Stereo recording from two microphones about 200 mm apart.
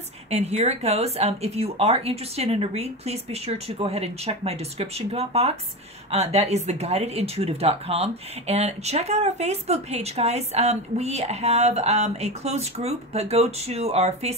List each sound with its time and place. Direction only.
0.3 s speech: 30° right (ahead or behind)